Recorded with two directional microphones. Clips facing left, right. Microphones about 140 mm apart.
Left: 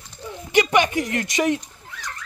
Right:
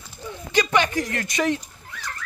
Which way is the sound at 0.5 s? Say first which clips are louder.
Left 3 dB; 15° left (ahead or behind).